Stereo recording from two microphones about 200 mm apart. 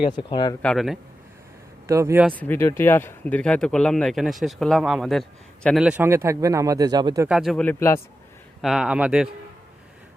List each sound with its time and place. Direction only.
0.0 s speech: 25° left (ahead or behind)
0.6 s speech: centre (ahead or behind)
1.9 s speech: 15° right (ahead or behind)
2.3 s speech: 10° left (ahead or behind); by 7.3 s 20° right (ahead or behind)
7.3 s speech: centre (ahead or behind)
8.6 s speech: 5° right (ahead or behind)